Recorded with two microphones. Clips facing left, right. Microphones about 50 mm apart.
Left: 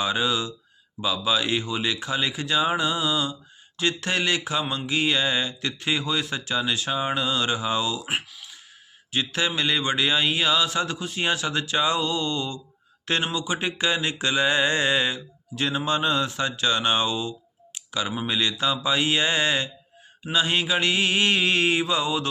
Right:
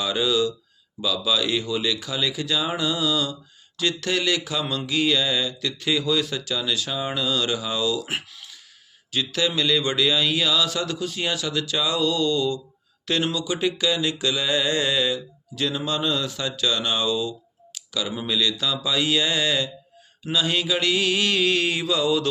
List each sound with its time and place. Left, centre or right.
0.0 s speech: left
8.1 s speech: centre
9.1 s speech: left
13.1 s mantra: left
20.3 s speech: left